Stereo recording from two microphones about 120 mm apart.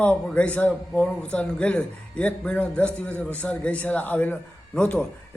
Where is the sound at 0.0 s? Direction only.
10° left (ahead or behind).